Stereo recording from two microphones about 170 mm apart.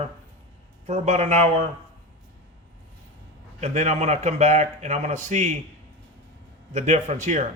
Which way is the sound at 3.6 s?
40° right (ahead or behind).